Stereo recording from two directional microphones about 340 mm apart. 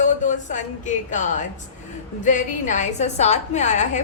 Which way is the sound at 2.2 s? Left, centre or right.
Left.